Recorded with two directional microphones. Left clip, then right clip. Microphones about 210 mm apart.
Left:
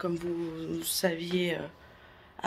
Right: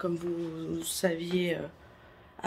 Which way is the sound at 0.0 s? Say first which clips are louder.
Even; 5° right (ahead or behind).